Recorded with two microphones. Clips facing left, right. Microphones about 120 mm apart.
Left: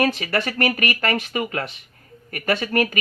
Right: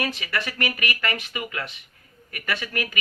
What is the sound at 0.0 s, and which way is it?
Speech, 40° left (ahead or behind).